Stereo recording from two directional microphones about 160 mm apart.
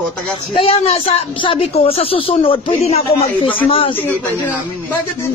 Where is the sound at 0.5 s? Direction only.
40° left (ahead or behind).